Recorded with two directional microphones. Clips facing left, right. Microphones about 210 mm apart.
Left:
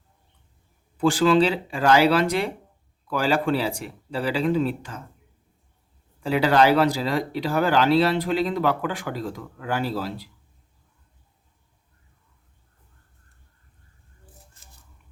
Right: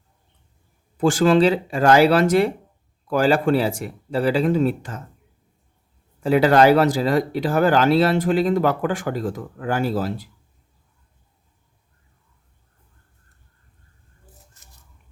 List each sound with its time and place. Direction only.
0.9 s speech: 45° right (ahead or behind)
6.1 s speech: 45° right (ahead or behind)